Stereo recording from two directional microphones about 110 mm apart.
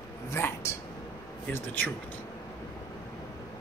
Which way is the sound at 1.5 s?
15° left (ahead or behind).